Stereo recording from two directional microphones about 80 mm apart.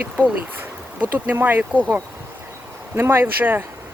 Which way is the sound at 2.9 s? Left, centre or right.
Right.